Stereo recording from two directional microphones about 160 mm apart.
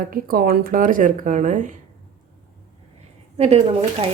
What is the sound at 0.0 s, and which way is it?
Speech, 65° right (ahead or behind).